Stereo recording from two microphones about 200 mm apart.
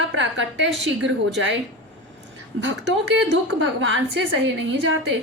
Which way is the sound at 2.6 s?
65° right (ahead or behind).